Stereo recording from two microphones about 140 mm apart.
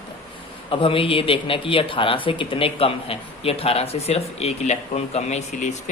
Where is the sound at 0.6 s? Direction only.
40° left (ahead or behind).